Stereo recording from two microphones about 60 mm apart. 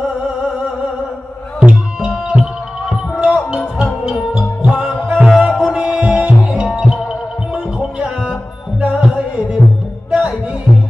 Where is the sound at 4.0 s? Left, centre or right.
Centre.